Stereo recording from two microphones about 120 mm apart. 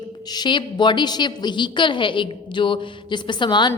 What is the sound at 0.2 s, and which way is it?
A woman's voice, 35° left (ahead or behind).